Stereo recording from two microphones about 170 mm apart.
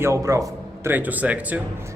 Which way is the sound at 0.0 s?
20° right (ahead or behind).